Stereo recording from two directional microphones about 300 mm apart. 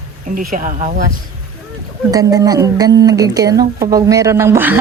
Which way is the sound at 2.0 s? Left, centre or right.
Centre.